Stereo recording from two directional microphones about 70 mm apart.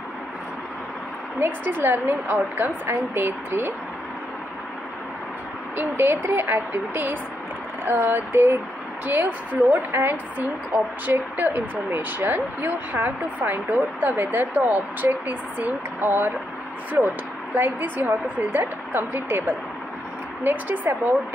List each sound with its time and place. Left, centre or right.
1.6 s a woman's voice: right
5.8 s a woman's voice: right
17.6 s a woman's voice: right